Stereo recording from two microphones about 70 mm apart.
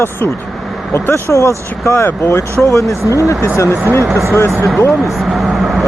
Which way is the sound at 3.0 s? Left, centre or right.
Right.